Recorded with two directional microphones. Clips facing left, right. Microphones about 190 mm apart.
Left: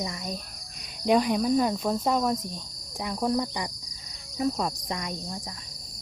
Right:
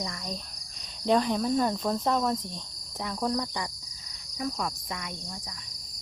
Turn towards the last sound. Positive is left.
turn(degrees=30)  # may be behind; listen again after turning